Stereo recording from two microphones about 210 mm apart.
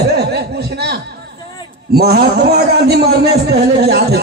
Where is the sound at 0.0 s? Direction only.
50° right (ahead or behind).